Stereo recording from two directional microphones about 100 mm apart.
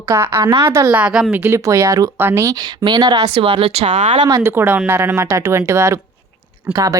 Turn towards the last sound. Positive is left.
turn(degrees=-40)  # may be behind; listen again after turning